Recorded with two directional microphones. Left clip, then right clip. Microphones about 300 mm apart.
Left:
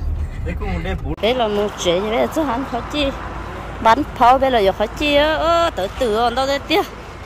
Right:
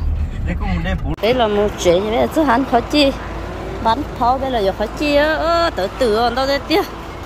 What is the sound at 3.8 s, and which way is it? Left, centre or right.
Speech, centre.